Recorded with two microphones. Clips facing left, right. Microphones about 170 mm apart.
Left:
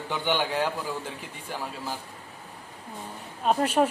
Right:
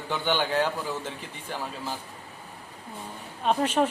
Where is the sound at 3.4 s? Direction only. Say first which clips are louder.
Left 1 dB; 5° left (ahead or behind).